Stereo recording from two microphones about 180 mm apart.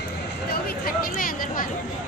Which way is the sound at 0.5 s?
55° left (ahead or behind).